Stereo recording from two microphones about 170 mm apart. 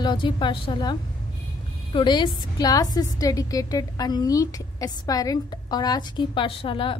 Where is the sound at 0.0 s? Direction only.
25° left (ahead or behind).